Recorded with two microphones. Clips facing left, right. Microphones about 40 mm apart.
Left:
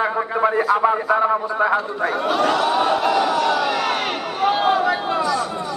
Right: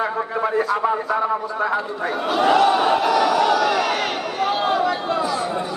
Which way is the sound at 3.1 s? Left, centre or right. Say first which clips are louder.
Right 1 dB; centre.